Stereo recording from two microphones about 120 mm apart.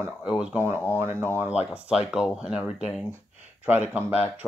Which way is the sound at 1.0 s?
20° right (ahead or behind).